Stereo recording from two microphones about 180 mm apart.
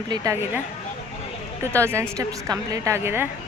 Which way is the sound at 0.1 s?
15° right (ahead or behind).